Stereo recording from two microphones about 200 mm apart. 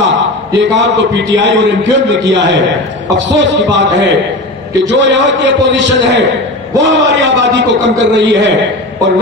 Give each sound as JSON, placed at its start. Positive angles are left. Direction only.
{"t": 0.0, "sound": "a man's voice", "side_deg": -65}